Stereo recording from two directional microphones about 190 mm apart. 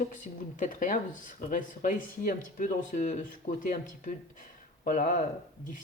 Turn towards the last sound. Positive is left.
turn(degrees=45)  # may be behind; listen again after turning